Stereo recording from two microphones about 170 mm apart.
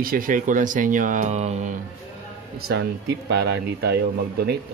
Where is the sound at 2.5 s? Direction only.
65° right (ahead or behind).